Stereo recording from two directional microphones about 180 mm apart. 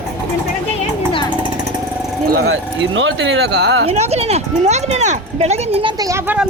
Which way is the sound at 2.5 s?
90° right.